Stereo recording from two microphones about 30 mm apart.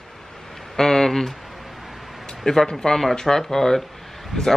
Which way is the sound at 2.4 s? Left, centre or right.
Centre.